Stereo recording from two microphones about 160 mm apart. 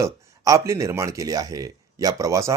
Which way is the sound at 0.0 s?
20° right (ahead or behind).